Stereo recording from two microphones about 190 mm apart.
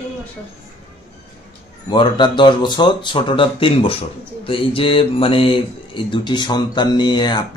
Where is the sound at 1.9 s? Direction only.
25° left (ahead or behind).